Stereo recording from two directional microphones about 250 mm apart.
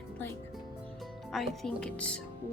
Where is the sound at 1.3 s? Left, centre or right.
Centre.